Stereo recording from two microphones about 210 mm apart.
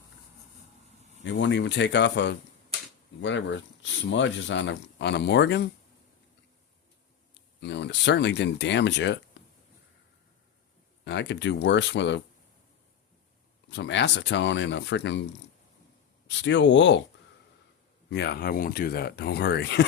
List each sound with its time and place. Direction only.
1.2 s speech: 60° left (ahead or behind)
7.6 s speech: 55° left (ahead or behind)
9.4 s a sound: 60° left (ahead or behind)
11.0 s speech: 55° left (ahead or behind)
13.7 s speech: 60° left (ahead or behind)
16.2 s speech: 60° left (ahead or behind)
18.1 s speech: 55° left (ahead or behind)